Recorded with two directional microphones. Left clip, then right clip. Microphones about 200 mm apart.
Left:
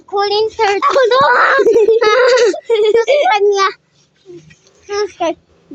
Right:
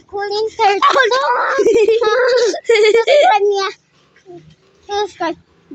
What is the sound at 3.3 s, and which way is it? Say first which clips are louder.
Speech: left 2 dB; 10° left (ahead or behind).